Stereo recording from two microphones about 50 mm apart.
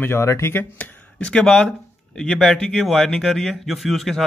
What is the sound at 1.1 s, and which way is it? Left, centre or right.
Speech, centre.